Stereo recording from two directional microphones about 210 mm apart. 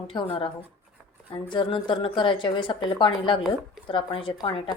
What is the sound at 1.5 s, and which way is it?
Speech, 20° left (ahead or behind).